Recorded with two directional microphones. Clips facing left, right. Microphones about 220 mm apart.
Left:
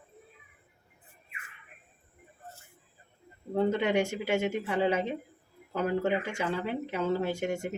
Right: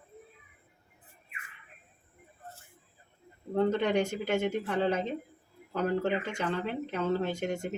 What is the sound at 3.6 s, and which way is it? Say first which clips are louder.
Speech: even; 10° left (ahead or behind).